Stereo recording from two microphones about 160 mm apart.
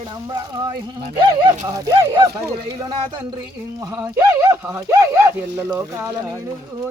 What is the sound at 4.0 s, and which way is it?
Speech, 20° right (ahead or behind).